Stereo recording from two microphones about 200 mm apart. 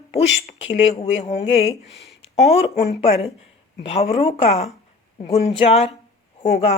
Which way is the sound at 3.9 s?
30° left (ahead or behind).